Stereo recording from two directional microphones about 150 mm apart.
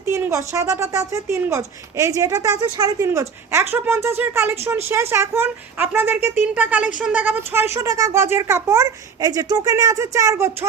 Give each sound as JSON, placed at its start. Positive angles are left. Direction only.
{"t": 0.0, "sound": "speech", "side_deg": -20}